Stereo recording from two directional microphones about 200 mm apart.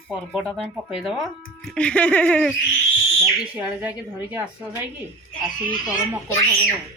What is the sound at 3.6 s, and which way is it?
Speech, 5° right (ahead or behind).